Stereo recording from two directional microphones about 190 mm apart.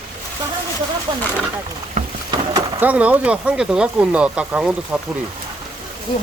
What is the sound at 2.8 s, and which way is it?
Speech, 10° right (ahead or behind).